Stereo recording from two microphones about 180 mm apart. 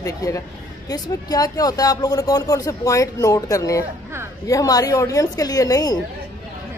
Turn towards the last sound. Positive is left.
turn(degrees=20)  # may be behind; listen again after turning